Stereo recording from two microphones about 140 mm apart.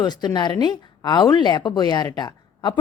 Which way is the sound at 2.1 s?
30° left (ahead or behind).